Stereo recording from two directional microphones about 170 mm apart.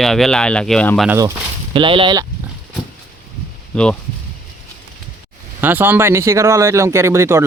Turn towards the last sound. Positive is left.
turn(degrees=-15)  # may be behind; listen again after turning